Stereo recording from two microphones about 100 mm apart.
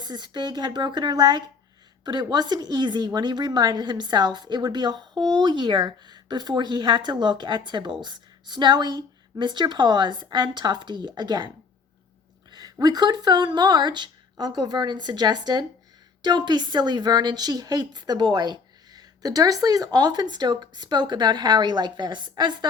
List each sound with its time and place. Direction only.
0.0 s a woman's voice: 45° right (ahead or behind)
12.5 s a sound: 40° right (ahead or behind)
12.8 s a woman's voice: 40° right (ahead or behind)